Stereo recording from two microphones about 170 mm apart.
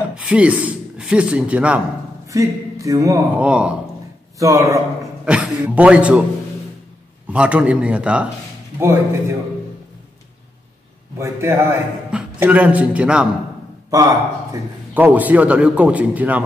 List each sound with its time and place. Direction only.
0.1 s speech: 5° right (ahead or behind)
2.2 s speech: 20° right (ahead or behind)
3.4 s a man's voice: 5° right (ahead or behind)
4.4 s speech: 20° right (ahead or behind)
5.2 s a man's voice: 5° right (ahead or behind)
7.2 s a man's voice: 5° right (ahead or behind)
11.1 s a man's voice: 15° right (ahead or behind)
14.5 s a man's voice: 10° right (ahead or behind)